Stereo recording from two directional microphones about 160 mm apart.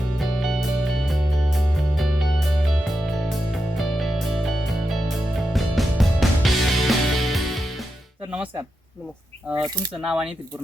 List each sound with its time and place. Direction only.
0.2 s music: centre (ahead or behind)
9.5 s speech: 25° right (ahead or behind)
10.0 s speech: 5° right (ahead or behind)